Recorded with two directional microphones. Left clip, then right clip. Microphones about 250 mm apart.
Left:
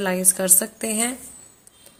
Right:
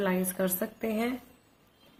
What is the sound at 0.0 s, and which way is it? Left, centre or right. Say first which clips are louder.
A woman's voice: left 6 dB; left.